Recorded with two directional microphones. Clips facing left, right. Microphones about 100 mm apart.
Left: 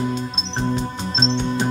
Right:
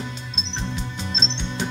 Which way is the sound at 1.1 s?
45° left (ahead or behind).